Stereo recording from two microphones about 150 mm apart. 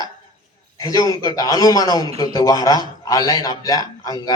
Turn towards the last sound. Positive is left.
turn(degrees=25)  # may be behind; listen again after turning